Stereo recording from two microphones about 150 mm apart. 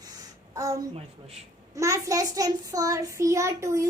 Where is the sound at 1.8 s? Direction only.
20° right (ahead or behind).